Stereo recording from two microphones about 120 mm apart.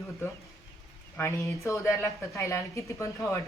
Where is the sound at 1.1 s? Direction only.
25° left (ahead or behind).